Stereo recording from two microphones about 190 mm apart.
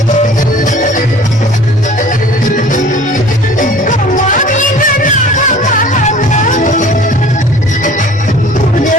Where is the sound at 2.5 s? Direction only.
40° left (ahead or behind).